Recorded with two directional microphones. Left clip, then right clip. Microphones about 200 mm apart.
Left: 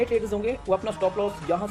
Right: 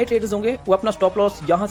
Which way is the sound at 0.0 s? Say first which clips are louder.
Right 5 dB; 30° right (ahead or behind).